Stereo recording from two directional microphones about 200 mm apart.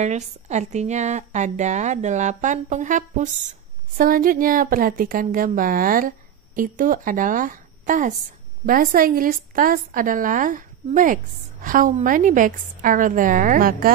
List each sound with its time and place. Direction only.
0.0 s a woman's voice: 35° right (ahead or behind)